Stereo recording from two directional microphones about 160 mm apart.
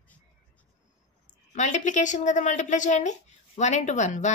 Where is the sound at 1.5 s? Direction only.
50° left (ahead or behind).